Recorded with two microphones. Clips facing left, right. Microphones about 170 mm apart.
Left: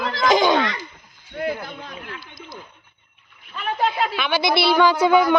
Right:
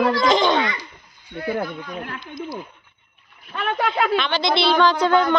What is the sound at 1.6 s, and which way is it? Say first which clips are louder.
Speech: right 7 dB; 50° right (ahead or behind).